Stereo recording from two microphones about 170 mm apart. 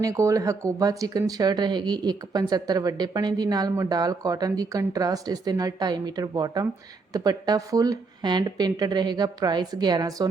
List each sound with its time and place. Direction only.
0.0 s speech: 20° right (ahead or behind)